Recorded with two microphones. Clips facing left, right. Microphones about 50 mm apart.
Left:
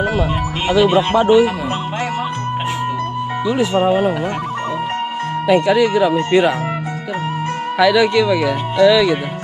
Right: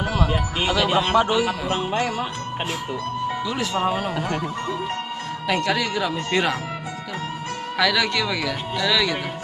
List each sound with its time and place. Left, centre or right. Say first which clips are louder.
0.2 s speech: left 3 dB; centre
3.8 s speech: left 8 dB; centre
5.5 s speech: left 9 dB; centre
7.8 s speech: left 8 dB; centre